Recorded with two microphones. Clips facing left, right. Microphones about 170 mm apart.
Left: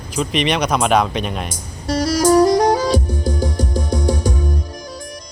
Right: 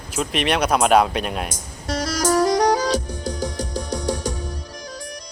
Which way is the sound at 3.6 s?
50° left (ahead or behind).